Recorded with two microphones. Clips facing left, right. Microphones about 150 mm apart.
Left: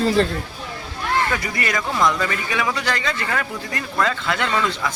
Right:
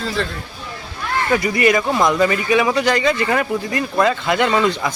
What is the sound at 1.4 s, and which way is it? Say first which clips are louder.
Speech: right 9 dB; 15° right (ahead or behind).